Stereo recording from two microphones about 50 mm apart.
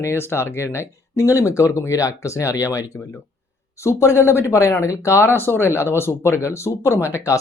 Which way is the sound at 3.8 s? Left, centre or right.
Left.